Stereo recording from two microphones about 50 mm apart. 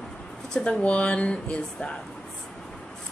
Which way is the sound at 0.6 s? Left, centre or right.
Left.